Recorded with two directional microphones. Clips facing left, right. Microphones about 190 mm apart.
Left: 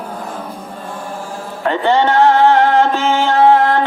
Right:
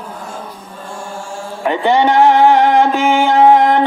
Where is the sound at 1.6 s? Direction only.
15° right (ahead or behind).